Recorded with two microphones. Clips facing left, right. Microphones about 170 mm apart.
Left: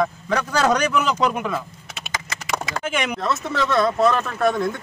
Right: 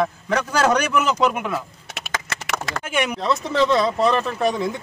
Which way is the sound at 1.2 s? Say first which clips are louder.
Right 1 dB; 5° right (ahead or behind).